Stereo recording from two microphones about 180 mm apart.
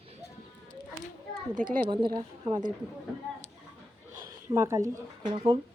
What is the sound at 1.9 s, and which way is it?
Speech, 25° right (ahead or behind).